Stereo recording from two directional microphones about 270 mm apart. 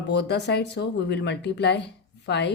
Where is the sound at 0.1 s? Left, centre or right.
Left.